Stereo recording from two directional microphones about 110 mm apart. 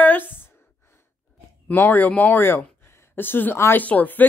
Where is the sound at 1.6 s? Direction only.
20° left (ahead or behind).